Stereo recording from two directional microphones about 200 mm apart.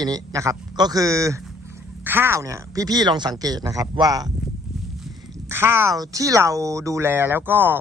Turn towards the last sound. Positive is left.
turn(degrees=-10)  # may be behind; listen again after turning